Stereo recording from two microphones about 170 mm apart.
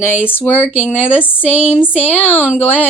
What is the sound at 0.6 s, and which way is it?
Speech, 10° right (ahead or behind).